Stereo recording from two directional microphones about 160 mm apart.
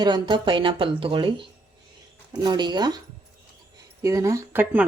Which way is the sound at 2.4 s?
25° right (ahead or behind).